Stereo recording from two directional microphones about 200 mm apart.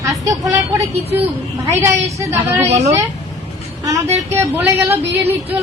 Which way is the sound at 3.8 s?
15° right (ahead or behind).